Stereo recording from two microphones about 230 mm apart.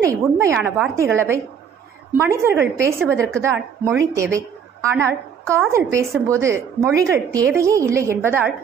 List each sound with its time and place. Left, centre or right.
0.0 s a woman's voice: centre